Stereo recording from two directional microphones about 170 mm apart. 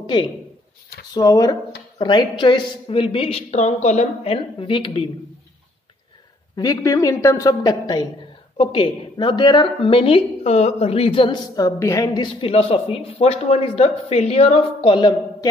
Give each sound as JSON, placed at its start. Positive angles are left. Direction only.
{"t": 0.0, "sound": "a man's voice", "side_deg": 25}
{"t": 6.5, "sound": "a man's voice", "side_deg": 20}